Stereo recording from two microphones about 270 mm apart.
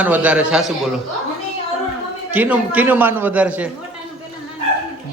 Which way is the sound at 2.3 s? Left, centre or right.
Centre.